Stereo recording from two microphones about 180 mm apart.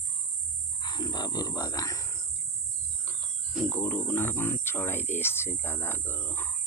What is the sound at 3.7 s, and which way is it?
Speech, 10° left (ahead or behind).